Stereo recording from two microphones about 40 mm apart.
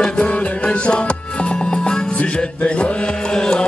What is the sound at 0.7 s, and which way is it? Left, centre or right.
Music, left.